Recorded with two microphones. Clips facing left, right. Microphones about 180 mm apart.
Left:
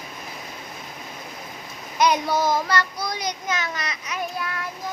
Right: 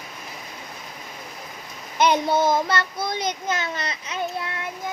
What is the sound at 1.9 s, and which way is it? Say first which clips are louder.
Child singing: right 1 dB; 25° right (ahead or behind).